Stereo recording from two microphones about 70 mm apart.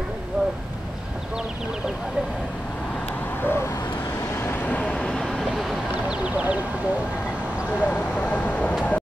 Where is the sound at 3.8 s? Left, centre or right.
Left.